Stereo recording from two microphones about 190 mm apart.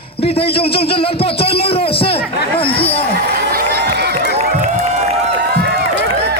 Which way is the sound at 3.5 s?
60° right (ahead or behind).